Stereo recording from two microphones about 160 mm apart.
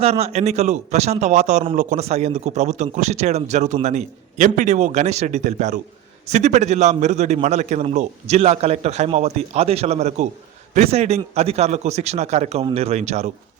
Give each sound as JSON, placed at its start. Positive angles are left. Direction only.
{"t": 0.0, "sound": "a man's voice", "side_deg": -40}